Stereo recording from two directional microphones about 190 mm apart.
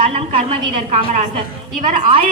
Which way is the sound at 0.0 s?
30° right (ahead or behind).